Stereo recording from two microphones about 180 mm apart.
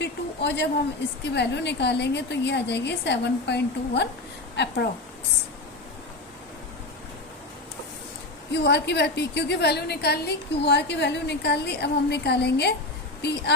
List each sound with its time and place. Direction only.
0.0 s a sound: 70° left (ahead or behind)
1.2 s a woman's voice: 70° left (ahead or behind)
8.5 s a woman's voice: 70° left (ahead or behind)